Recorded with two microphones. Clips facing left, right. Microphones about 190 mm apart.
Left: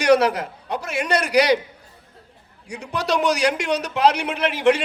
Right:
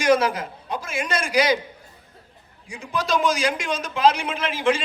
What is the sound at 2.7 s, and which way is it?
A man's voice, 70° left (ahead or behind).